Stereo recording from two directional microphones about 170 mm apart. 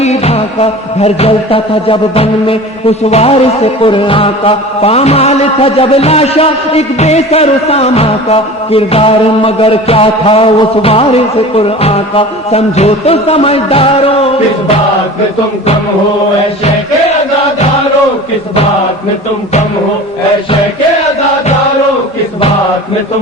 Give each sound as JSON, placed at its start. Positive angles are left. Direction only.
{"t": 0.0, "sound": "music", "side_deg": 40}